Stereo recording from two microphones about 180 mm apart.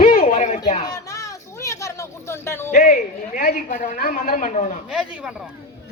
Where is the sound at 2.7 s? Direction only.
45° left (ahead or behind).